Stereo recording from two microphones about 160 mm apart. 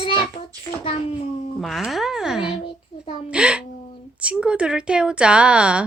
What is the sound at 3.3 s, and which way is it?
A woman's voice, 5° right (ahead or behind).